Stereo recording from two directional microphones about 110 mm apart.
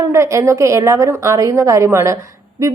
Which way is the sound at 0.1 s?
25° right (ahead or behind).